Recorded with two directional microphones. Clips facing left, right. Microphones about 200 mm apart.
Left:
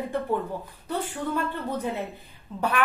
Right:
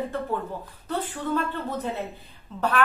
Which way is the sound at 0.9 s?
10° left (ahead or behind).